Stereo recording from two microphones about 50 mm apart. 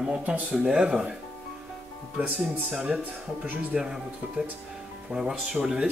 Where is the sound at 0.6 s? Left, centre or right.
Right.